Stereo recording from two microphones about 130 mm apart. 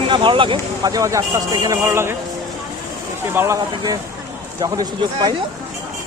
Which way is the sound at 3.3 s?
20° right (ahead or behind).